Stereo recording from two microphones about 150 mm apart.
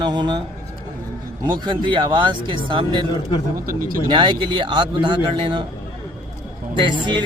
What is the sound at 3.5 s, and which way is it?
Speech, 70° right (ahead or behind).